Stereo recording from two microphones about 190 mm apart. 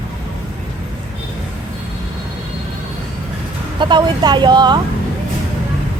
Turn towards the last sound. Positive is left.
turn(degrees=-25)  # may be behind; listen again after turning